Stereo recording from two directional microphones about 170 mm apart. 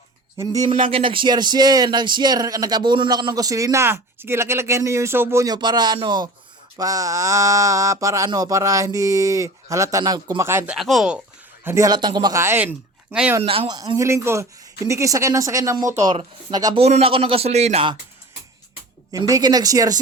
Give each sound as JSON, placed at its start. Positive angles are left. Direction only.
{"t": 0.3, "sound": "speech", "side_deg": -20}
{"t": 10.8, "sound": "speech", "side_deg": 0}
{"t": 11.6, "sound": "speech", "side_deg": -15}
{"t": 13.4, "sound": "speech", "side_deg": -30}
{"t": 16.8, "sound": "a man's voice", "side_deg": -35}
{"t": 19.1, "sound": "speech", "side_deg": -20}